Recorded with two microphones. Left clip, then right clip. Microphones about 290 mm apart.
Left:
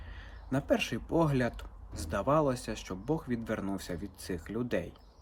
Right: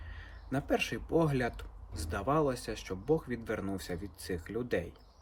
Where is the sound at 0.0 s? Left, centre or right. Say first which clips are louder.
Even; centre.